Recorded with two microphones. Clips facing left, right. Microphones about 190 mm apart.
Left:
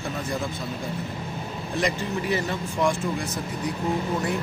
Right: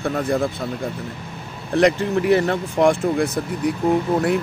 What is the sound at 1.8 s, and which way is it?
Speech, 65° right (ahead or behind).